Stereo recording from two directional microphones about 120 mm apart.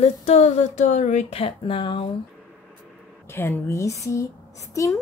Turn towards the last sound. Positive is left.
turn(degrees=25)  # may be behind; listen again after turning